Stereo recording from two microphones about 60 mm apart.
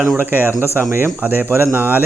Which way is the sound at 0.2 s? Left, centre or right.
Right.